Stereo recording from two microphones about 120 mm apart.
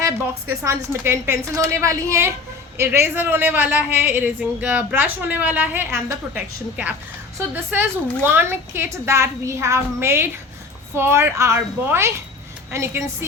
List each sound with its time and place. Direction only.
0.6 s a woman's voice: 25° right (ahead or behind)